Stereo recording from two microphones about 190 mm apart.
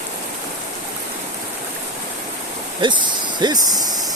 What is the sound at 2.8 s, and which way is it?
Speech, 25° right (ahead or behind).